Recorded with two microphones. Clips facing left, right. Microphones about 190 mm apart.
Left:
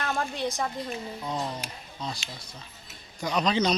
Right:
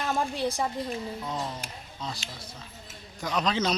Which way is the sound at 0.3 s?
30° right (ahead or behind).